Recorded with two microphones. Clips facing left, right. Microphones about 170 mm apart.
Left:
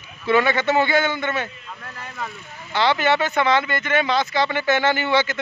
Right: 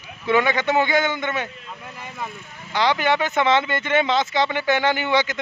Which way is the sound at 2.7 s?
15° right (ahead or behind).